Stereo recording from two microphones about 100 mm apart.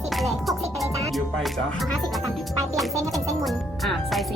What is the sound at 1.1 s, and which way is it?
Speech, centre (ahead or behind).